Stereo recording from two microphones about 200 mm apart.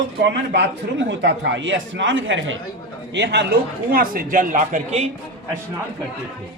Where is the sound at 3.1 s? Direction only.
55° right (ahead or behind); by 5.1 s 35° right (ahead or behind).